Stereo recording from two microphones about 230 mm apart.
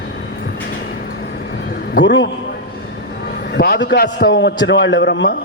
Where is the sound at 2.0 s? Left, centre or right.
Left.